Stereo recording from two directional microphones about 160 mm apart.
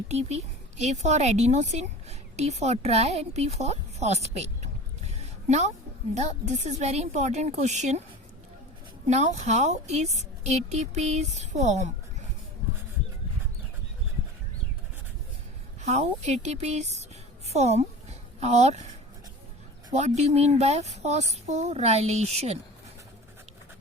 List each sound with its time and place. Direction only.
0.1 s a woman's voice: 45° right (ahead or behind)
9.0 s a woman's voice: 45° right (ahead or behind)
15.8 s a woman's voice: 45° right (ahead or behind)
19.9 s a woman's voice: 45° right (ahead or behind)